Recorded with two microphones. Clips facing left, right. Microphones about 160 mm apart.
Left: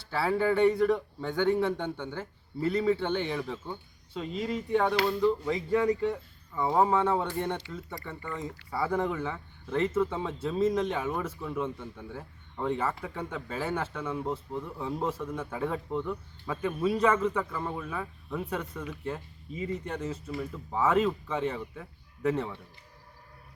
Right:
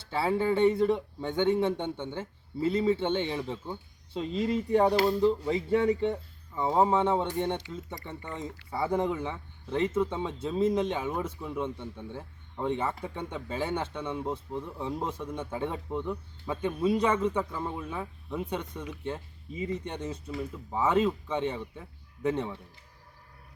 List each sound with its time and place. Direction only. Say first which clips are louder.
0.0 s speech: even; 25° right (ahead or behind)
17.5 s speech: even; 5° right (ahead or behind)
17.7 s speech: even; 20° right (ahead or behind)